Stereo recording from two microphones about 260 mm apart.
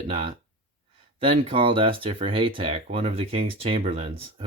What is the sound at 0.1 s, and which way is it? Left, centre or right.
Speech, centre.